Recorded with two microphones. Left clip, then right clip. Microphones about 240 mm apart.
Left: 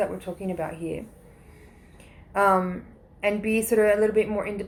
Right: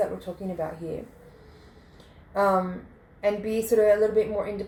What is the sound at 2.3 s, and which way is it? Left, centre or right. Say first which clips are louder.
Speech: left 2 dB; left.